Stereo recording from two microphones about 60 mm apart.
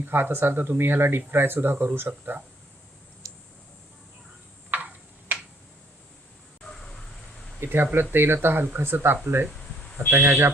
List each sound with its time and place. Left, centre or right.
0.0 s speech: right
4.7 s tick-tock: right
7.6 s speech: right